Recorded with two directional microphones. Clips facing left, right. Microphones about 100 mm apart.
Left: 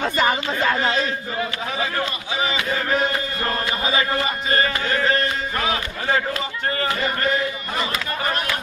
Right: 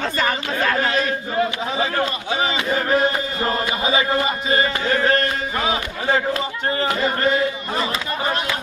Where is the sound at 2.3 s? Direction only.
40° right (ahead or behind).